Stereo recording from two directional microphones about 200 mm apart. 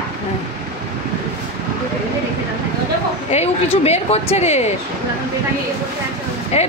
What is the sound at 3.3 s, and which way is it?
A woman's voice, 30° left (ahead or behind).